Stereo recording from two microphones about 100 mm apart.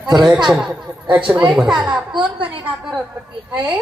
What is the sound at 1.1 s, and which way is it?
Speech, 15° right (ahead or behind).